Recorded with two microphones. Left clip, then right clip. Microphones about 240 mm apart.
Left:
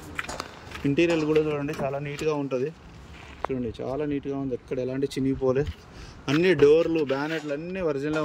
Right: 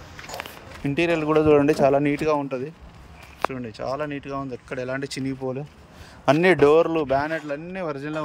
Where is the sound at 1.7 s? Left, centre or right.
Right.